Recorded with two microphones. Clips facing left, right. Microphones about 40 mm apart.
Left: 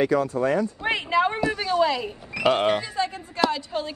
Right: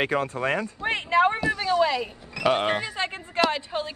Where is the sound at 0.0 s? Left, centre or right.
Right.